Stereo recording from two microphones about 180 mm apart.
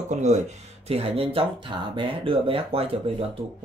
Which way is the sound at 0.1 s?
40° right (ahead or behind).